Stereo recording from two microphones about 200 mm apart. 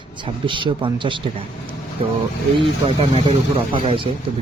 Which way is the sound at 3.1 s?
25° right (ahead or behind).